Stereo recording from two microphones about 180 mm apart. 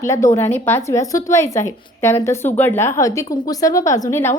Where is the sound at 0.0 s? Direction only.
15° left (ahead or behind).